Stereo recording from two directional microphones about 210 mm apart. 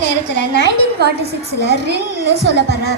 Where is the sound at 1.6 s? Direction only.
50° right (ahead or behind).